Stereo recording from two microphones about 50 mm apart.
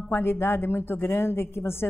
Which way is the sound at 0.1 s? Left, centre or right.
Left.